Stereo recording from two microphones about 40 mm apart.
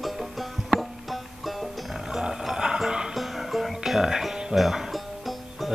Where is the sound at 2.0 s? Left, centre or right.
Centre.